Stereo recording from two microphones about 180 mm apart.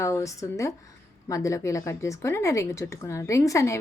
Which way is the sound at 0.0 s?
15° left (ahead or behind).